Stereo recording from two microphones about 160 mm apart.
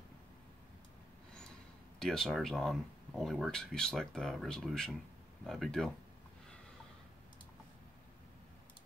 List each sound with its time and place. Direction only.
2.0 s speech: 5° left (ahead or behind)